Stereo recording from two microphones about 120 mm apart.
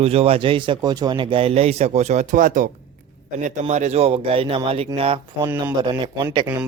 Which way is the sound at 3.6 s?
65° right (ahead or behind).